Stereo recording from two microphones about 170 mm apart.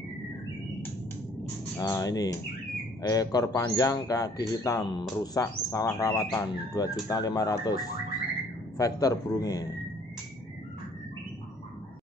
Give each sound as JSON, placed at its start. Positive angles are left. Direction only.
{"t": 1.8, "sound": "speech", "side_deg": 20}